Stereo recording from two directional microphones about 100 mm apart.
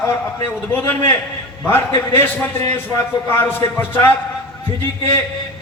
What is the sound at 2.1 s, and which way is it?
A man's voice, 20° left (ahead or behind).